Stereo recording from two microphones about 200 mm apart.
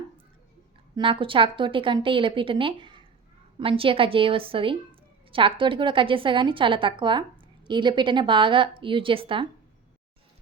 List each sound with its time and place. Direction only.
0.9 s a woman's voice: 25° right (ahead or behind)